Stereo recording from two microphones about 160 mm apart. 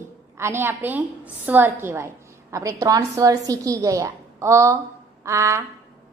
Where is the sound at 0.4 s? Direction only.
15° right (ahead or behind).